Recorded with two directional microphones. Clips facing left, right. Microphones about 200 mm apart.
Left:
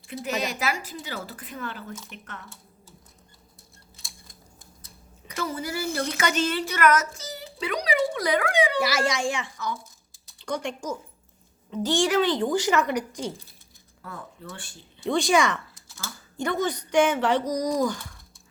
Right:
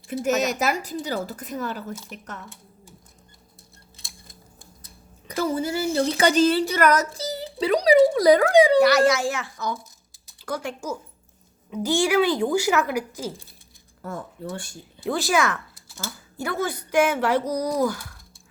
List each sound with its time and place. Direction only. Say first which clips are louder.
0.3 s a woman's voice: right 5 dB; 45° right (ahead or behind)
5.3 s a woman's voice: right 6 dB; 30° right (ahead or behind)
8.8 s a child's voice: right 8 dB; centre (ahead or behind)
14.0 s speech: right 7 dB; 40° right (ahead or behind)
15.0 s a child's voice: left 1 dB; 5° right (ahead or behind)